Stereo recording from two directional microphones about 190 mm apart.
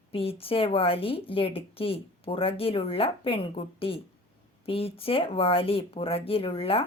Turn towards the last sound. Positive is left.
turn(degrees=30)  # may be behind; listen again after turning